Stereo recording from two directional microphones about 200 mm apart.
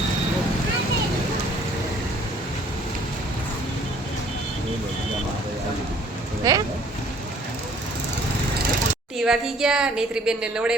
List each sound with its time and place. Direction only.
6.5 s speech: 15° right (ahead or behind)
9.1 s a woman's voice: centre (ahead or behind)